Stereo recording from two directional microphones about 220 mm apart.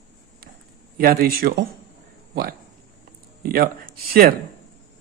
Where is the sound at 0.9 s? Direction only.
40° right (ahead or behind).